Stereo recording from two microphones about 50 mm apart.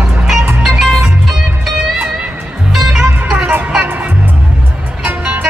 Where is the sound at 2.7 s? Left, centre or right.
Centre.